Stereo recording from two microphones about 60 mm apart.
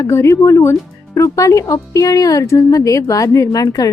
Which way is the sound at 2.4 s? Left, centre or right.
Left.